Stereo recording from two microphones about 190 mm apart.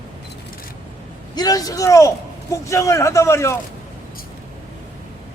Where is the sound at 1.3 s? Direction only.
20° left (ahead or behind).